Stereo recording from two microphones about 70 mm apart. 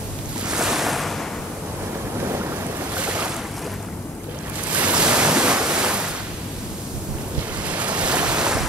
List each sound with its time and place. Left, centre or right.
0.5 s waves: centre
3.0 s boat: centre
4.7 s waves: centre
7.6 s waves: centre